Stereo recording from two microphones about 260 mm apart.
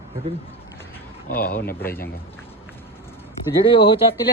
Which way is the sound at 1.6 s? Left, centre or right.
Centre.